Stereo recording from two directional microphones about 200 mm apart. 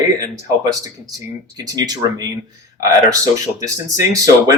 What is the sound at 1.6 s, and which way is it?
Speech, 20° right (ahead or behind).